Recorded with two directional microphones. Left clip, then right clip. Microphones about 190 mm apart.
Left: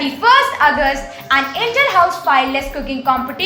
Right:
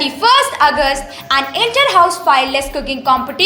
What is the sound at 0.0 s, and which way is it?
A woman's voice, 45° right (ahead or behind).